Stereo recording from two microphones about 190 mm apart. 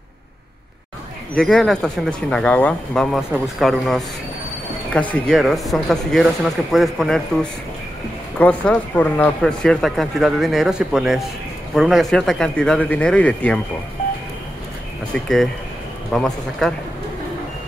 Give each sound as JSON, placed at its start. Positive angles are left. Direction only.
{"t": 1.3, "sound": "speech", "side_deg": 0}
{"t": 8.4, "sound": "speech", "side_deg": 5}
{"t": 15.1, "sound": "speech", "side_deg": 0}